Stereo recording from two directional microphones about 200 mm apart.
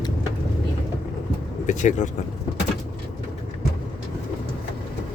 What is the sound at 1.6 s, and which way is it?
Speech, 35° left (ahead or behind).